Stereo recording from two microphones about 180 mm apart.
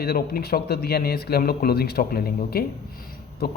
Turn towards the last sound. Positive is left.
turn(degrees=60)  # may be behind; listen again after turning